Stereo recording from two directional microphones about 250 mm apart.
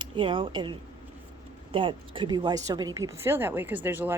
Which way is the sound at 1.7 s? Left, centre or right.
Centre.